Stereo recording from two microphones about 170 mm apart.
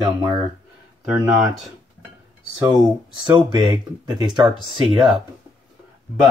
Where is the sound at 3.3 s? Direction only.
25° right (ahead or behind).